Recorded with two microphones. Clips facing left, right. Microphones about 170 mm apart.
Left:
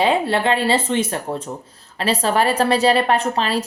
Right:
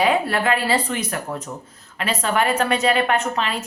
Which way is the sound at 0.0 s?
25° left (ahead or behind).